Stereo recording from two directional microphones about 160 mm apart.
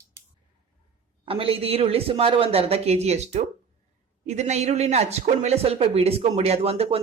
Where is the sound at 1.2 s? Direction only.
35° right (ahead or behind).